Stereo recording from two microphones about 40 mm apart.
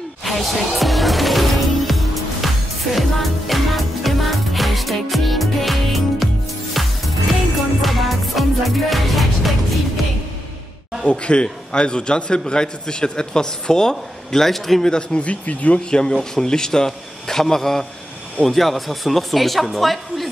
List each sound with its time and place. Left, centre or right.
0.2 s music: centre
11.1 s a man's voice: left; by 14.8 s centre
14.8 s a man's voice: left
15.2 s speech: left
15.9 s a man's voice: centre